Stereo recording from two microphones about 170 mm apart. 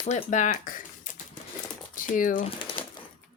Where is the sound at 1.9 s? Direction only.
50° left (ahead or behind).